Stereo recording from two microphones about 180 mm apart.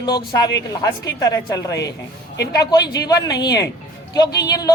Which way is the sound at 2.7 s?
20° left (ahead or behind).